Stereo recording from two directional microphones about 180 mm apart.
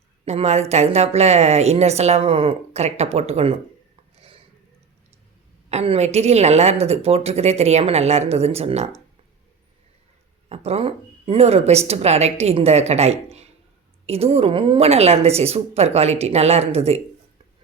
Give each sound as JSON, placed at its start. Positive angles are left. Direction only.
{"t": 0.3, "sound": "speech", "side_deg": -35}
{"t": 5.6, "sound": "speech", "side_deg": -35}
{"t": 10.5, "sound": "speech", "side_deg": -35}